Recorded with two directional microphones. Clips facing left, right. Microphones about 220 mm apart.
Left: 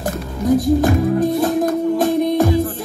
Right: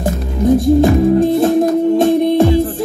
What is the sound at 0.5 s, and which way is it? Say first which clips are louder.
Music: right 4 dB; 25° right (ahead or behind).